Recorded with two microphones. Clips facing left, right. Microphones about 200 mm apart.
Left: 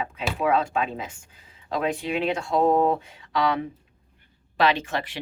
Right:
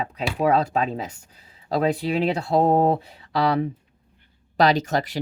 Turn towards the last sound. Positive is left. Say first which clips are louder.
# right 5 dB
turn(degrees=-40)  # may be behind; listen again after turning